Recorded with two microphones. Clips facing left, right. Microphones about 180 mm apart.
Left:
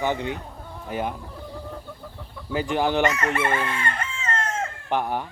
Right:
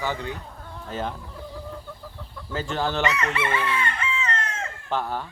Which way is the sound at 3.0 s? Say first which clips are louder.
Left 2 dB; 50° left (ahead or behind).